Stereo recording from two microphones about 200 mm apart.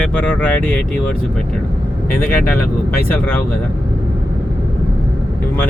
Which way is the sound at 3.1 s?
10° left (ahead or behind).